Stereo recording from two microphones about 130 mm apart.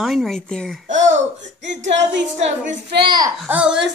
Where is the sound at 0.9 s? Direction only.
65° right (ahead or behind).